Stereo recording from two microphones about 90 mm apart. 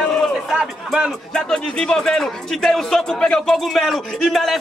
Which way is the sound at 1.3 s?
10° left (ahead or behind).